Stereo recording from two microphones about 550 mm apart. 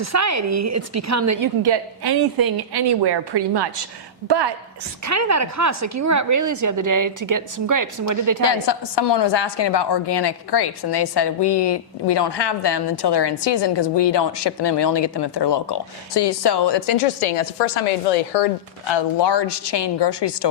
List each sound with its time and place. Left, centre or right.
0.0 s speech: right
1.6 s a woman's voice: right
5.0 s speech: right
8.4 s a woman's voice: left
18.3 s speech: left
18.9 s a woman's voice: left